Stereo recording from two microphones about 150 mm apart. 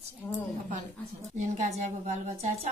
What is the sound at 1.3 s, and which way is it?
A woman's voice, 50° right (ahead or behind).